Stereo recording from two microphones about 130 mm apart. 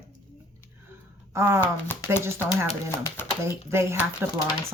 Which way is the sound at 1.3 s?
20° right (ahead or behind).